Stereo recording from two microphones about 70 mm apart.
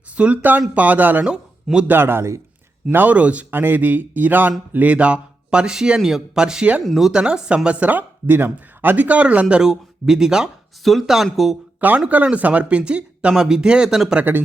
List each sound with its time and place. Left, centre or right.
0.2 s speech: right
1.2 s a man's voice: centre
1.9 s speech: right
2.9 s speech: right
6.8 s speech: centre
7.1 s speech: centre
11.8 s speech: centre
14.2 s speech: right